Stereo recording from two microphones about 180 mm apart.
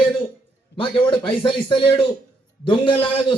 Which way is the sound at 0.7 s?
30° left (ahead or behind).